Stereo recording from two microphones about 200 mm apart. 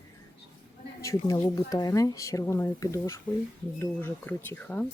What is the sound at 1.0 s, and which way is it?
Speech, 15° left (ahead or behind).